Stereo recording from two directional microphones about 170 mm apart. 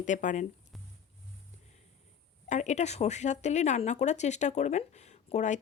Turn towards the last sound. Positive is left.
turn(degrees=45)  # may be behind; listen again after turning